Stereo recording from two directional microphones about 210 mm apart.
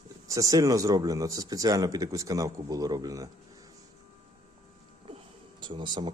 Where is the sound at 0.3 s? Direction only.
15° right (ahead or behind).